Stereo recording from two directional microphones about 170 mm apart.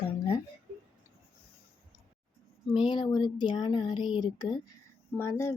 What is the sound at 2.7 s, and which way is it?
Speech, 30° left (ahead or behind).